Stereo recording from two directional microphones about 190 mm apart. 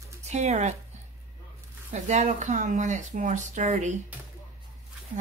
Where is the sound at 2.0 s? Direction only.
40° right (ahead or behind).